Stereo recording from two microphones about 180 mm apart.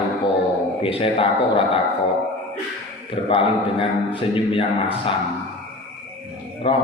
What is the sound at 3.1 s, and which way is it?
A man's voice, 30° left (ahead or behind).